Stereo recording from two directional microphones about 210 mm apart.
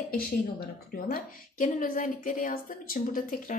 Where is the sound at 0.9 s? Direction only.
40° left (ahead or behind).